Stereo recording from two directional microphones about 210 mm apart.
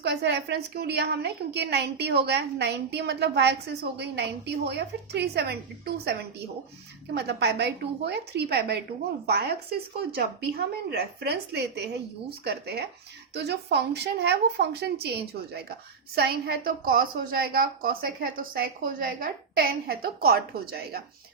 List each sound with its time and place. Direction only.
0.0 s a woman's voice: 55° right (ahead or behind)